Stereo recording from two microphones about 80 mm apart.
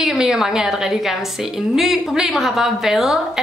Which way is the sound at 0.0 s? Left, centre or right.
Centre.